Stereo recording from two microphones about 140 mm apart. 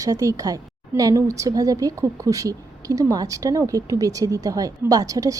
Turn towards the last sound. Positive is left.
turn(degrees=-25)  # may be behind; listen again after turning